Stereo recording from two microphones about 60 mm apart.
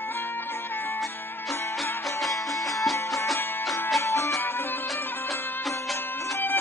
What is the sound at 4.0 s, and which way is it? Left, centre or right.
Music, left.